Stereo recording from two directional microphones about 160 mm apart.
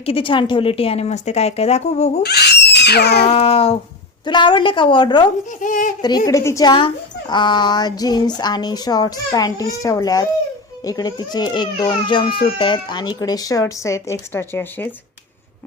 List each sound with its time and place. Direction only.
0.0 s speech: 35° left (ahead or behind)
2.2 s a sound: 90° left
3.2 s speech: 40° left (ahead or behind)
5.5 s speech: 55° left (ahead or behind)
6.0 s speech: 25° left (ahead or behind)
6.7 s speech: 30° left (ahead or behind); by 14.8 s 15° left (ahead or behind)